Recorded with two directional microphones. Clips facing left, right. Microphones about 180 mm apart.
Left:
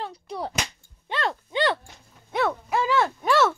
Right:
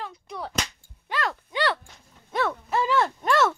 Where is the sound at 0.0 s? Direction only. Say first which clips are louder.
Left 3 dB; 35° left (ahead or behind).